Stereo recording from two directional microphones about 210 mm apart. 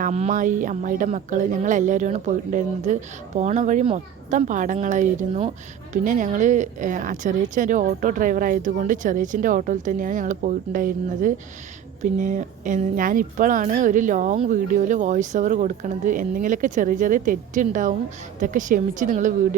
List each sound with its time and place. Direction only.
0.0 s a woman's voice: 35° right (ahead or behind)